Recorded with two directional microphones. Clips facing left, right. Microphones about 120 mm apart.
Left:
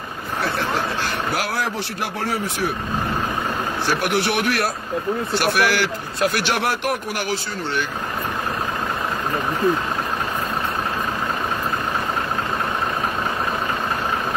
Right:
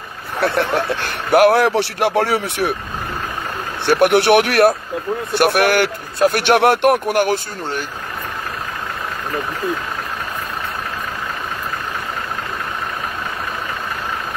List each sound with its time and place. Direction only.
0.4 s a man's voice: 60° right (ahead or behind)
3.8 s a man's voice: 60° right (ahead or behind)